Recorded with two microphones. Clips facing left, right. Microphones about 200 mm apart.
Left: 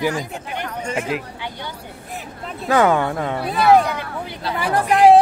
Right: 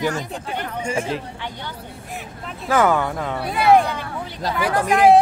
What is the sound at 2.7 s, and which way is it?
Speech, 20° left (ahead or behind).